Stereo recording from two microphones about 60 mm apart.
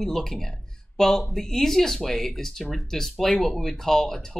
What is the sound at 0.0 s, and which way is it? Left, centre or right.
Speech, centre.